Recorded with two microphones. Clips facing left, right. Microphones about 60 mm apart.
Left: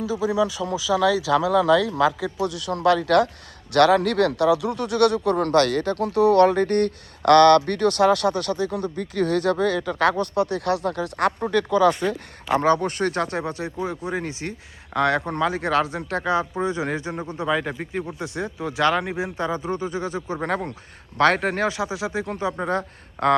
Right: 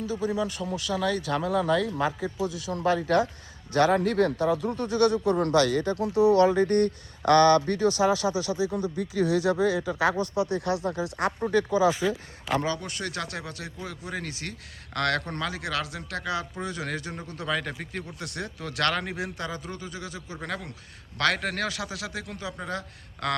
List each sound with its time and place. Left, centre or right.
0.3 s a man's voice: left
12.5 s speech: left
15.5 s speech: left